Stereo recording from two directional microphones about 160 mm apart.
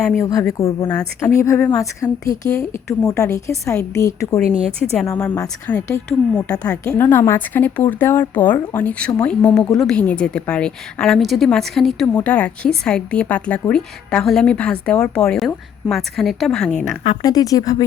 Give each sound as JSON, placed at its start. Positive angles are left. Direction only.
{"t": 0.2, "sound": "a woman's voice", "side_deg": 20}
{"t": 17.2, "sound": "a woman's voice", "side_deg": 20}